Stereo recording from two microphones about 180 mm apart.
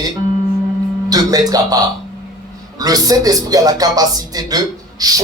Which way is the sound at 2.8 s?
20° right (ahead or behind).